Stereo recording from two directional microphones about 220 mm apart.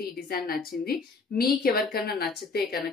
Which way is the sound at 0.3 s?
45° left (ahead or behind).